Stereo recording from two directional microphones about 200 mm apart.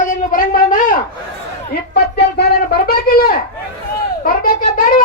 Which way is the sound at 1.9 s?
55° left (ahead or behind).